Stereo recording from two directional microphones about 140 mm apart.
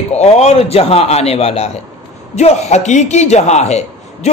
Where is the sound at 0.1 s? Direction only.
50° left (ahead or behind).